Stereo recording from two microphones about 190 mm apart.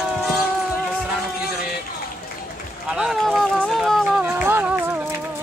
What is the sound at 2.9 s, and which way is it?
Run, centre (ahead or behind).